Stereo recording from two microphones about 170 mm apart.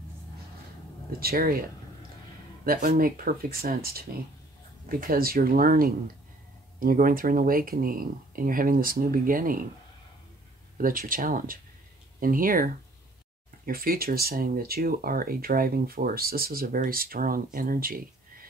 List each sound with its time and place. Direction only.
1.2 s speech: 60° right (ahead or behind)
2.6 s speech: 60° right (ahead or behind)
10.8 s speech: 55° right (ahead or behind)